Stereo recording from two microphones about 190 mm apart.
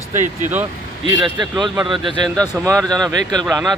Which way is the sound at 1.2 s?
25° right (ahead or behind).